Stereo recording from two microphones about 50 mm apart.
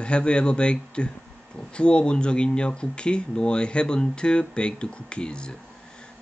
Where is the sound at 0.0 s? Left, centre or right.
Left.